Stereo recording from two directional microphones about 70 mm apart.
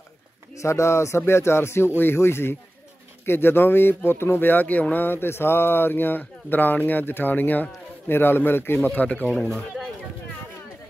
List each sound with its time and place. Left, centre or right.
0.6 s speech: left